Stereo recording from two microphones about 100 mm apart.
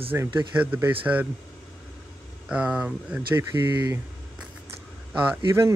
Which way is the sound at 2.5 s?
10° right (ahead or behind).